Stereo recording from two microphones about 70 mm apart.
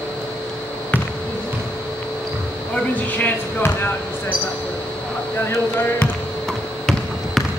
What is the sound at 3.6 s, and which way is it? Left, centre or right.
Speech, left.